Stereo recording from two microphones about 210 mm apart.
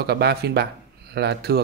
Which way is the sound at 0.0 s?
50° right (ahead or behind).